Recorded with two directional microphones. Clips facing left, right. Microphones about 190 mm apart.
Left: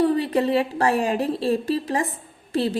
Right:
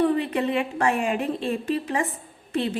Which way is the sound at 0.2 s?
35° left (ahead or behind).